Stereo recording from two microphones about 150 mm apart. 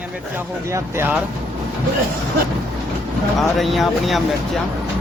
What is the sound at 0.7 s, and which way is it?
Speech, 20° right (ahead or behind).